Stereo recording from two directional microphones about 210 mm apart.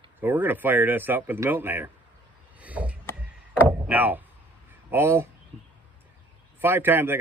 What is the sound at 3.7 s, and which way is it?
Speech, 10° right (ahead or behind).